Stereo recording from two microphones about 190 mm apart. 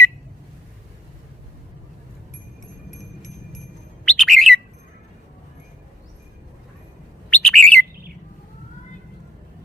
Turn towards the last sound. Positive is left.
turn(degrees=5)  # may be behind; listen again after turning